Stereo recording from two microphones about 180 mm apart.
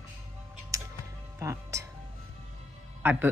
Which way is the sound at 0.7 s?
20° right (ahead or behind).